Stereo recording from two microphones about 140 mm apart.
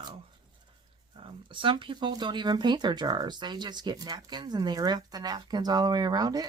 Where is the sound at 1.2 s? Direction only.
35° right (ahead or behind).